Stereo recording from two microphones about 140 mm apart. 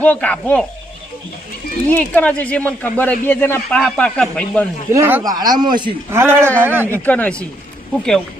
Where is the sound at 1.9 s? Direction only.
10° left (ahead or behind).